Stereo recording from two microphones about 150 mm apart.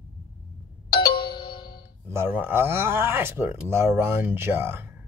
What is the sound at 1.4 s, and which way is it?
Music, 30° left (ahead or behind).